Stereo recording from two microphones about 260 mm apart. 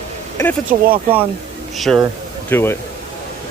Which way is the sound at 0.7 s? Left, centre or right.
Right.